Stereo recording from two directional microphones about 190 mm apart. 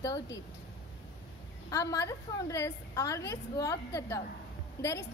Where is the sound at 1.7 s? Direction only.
20° left (ahead or behind).